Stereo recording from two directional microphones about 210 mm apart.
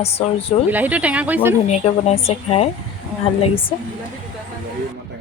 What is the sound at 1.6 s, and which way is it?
A woman's voice, 30° left (ahead or behind).